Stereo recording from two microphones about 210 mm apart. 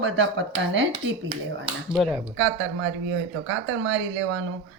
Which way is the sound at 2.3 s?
60° right (ahead or behind).